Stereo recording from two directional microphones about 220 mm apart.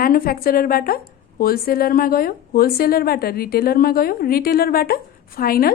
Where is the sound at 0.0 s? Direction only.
40° left (ahead or behind).